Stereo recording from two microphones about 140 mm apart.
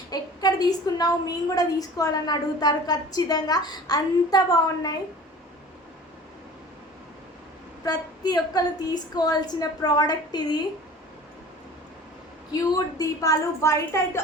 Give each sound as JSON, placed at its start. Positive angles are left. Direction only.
{"t": 0.1, "sound": "a woman's voice", "side_deg": 30}
{"t": 7.9, "sound": "a woman's voice", "side_deg": 30}
{"t": 12.5, "sound": "a woman's voice", "side_deg": 25}